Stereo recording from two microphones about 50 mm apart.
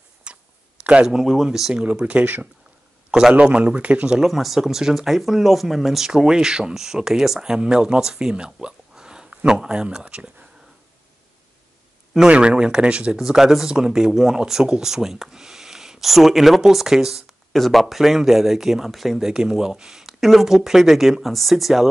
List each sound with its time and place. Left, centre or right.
0.3 s a sound: right
1.0 s speech: centre
1.9 s speech: right
3.1 s a man's voice: centre
4.2 s speech: centre
12.3 s speech: right
13.2 s speech: centre
17.5 s speech: centre